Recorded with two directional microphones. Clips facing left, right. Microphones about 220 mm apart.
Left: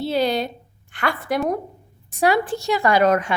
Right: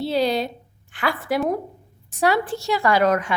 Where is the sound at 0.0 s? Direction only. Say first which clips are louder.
Even; centre (ahead or behind).